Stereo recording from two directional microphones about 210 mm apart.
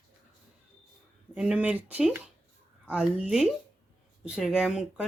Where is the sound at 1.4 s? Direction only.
5° right (ahead or behind).